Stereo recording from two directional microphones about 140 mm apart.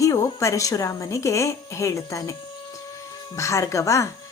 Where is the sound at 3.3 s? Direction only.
20° left (ahead or behind).